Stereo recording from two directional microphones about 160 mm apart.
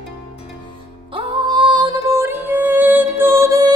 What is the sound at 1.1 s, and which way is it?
Music, 30° right (ahead or behind).